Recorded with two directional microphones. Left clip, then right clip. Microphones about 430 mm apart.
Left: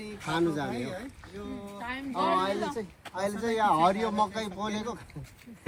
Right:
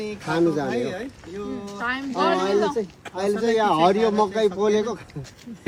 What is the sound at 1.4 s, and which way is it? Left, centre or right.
Speech, centre.